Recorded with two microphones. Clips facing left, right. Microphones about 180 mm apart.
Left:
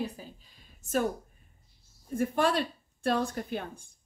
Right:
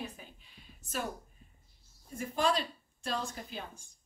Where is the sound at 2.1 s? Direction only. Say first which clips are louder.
Left 4 dB; 55° left (ahead or behind).